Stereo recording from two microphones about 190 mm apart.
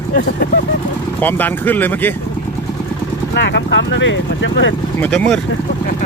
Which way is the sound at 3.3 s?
65° left (ahead or behind).